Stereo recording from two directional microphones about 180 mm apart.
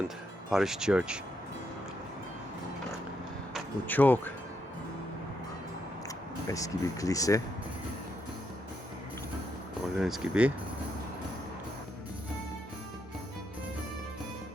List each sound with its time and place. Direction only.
0.5 s speech: centre (ahead or behind)
3.8 s speech: 10° left (ahead or behind)
6.5 s speech: 20° left (ahead or behind)
9.9 s speech: centre (ahead or behind)